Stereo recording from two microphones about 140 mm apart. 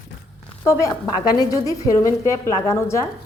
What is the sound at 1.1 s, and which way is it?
A woman's voice, 30° left (ahead or behind).